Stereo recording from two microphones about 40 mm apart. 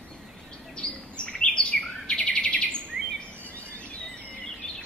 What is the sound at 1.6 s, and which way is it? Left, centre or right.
Bird, centre.